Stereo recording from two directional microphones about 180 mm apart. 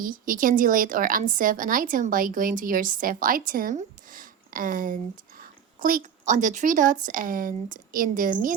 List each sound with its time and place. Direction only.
0.0 s a woman's voice: 50° right (ahead or behind)